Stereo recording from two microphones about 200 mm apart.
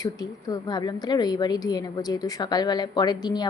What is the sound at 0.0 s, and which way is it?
A woman's voice, 20° left (ahead or behind).